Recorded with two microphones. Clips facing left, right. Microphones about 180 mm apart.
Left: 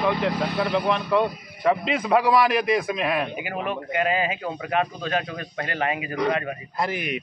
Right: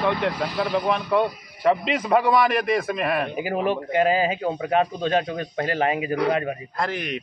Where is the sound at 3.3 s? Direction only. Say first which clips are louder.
Right 5 dB; 35° right (ahead or behind).